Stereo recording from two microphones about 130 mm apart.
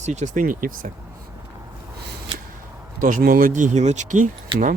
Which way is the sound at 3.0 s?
90° right.